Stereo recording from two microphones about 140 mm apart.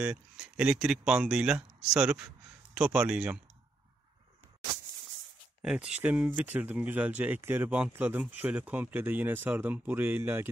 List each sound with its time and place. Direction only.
0.0 s speech: 10° right (ahead or behind)
5.6 s speech: 5° right (ahead or behind)